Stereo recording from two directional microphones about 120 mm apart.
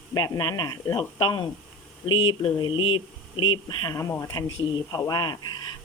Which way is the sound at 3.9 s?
25° left (ahead or behind).